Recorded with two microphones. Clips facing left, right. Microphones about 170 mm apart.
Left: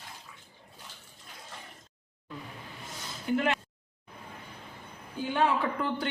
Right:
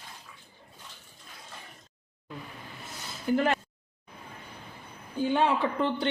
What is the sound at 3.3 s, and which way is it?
Speech, 35° right (ahead or behind).